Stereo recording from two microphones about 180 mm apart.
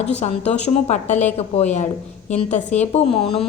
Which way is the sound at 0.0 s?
35° left (ahead or behind).